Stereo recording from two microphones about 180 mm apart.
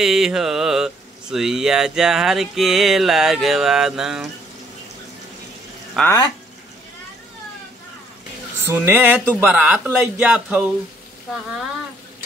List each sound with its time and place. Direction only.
0.0 s mantra: centre (ahead or behind)
6.0 s speech: 20° left (ahead or behind)
8.6 s speech: 10° right (ahead or behind)